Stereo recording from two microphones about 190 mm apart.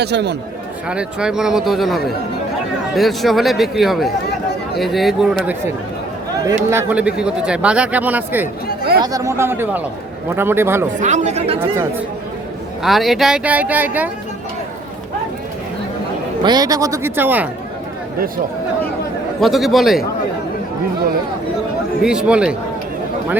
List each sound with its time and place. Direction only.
0.0 s speech: 60° right (ahead or behind)
0.9 s speech: 5° right (ahead or behind)
6.3 s speech: 15° right (ahead or behind)
11.0 s speech: 40° right (ahead or behind)
11.6 s speech: 10° right (ahead or behind)
12.8 s speech: centre (ahead or behind)
16.4 s speech: 20° right (ahead or behind)
19.4 s speech: centre (ahead or behind)
22.0 s speech: 5° right (ahead or behind)